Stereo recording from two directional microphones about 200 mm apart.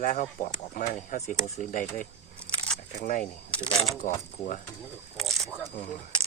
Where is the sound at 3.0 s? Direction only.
45° left (ahead or behind).